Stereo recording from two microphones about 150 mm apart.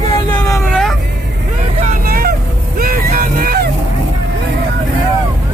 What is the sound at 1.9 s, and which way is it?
Vehicle, 80° right.